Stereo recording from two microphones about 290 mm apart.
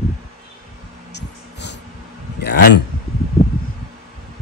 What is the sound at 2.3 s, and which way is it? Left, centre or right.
Speech, left.